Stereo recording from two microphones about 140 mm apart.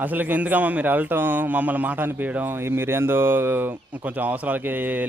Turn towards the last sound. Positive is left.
turn(degrees=-10)  # may be behind; listen again after turning